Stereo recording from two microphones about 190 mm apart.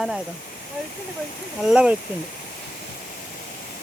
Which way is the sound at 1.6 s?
5° right (ahead or behind).